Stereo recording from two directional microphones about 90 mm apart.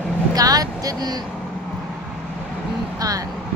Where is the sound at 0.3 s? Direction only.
45° right (ahead or behind).